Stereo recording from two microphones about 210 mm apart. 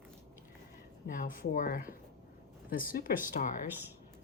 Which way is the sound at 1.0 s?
40° left (ahead or behind).